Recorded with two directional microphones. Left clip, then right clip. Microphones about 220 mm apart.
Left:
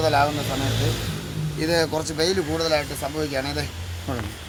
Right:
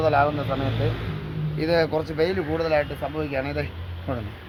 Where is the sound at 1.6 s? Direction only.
25° right (ahead or behind).